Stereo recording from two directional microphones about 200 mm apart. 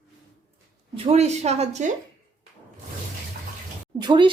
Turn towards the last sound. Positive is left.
turn(degrees=-20)  # may be behind; listen again after turning